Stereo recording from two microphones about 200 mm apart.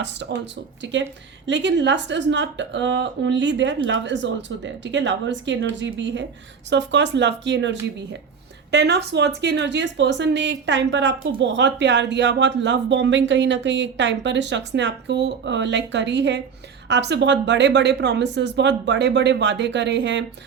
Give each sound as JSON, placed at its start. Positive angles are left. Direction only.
{"t": 0.0, "sound": "a woman's voice", "side_deg": -60}